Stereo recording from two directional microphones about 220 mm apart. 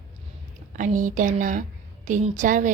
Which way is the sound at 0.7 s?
35° right (ahead or behind).